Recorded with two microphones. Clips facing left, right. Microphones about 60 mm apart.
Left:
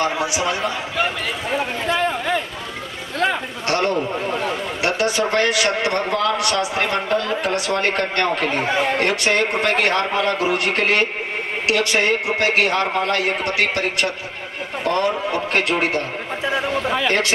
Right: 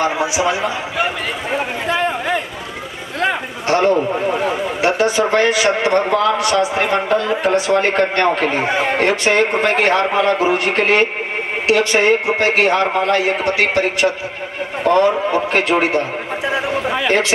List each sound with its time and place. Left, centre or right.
0.0 s a man's voice: centre
0.9 s a sound: centre
3.6 s a man's voice: centre
4.3 s a man's voice: centre